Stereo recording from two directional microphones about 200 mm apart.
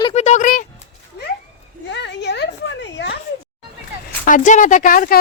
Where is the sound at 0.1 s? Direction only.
35° left (ahead or behind).